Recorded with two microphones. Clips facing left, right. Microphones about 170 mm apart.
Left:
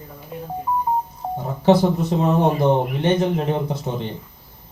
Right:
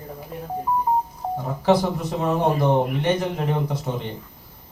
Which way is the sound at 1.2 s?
Centre (ahead or behind).